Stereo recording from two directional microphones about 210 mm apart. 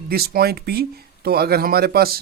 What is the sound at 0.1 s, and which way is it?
Speech, 45° right (ahead or behind).